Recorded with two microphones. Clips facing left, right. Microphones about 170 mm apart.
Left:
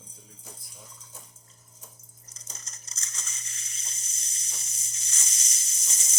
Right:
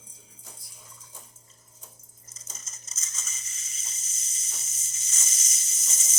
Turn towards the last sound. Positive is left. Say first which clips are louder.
# even
turn(degrees=-5)  # may be behind; listen again after turning